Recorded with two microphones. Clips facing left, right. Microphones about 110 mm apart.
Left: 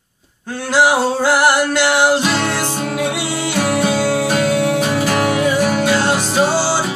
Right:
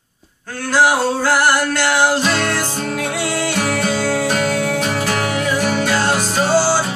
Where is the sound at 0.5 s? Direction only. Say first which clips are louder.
Left 1 dB; 20° left (ahead or behind).